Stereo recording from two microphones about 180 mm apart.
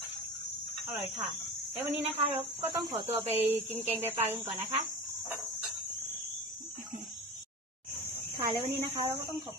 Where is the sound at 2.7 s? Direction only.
20° right (ahead or behind).